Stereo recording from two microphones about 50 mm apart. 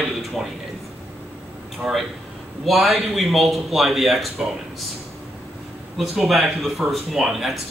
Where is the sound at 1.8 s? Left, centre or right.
Centre.